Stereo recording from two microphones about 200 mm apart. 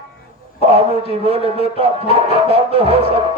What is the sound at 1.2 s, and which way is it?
Speech, 30° right (ahead or behind).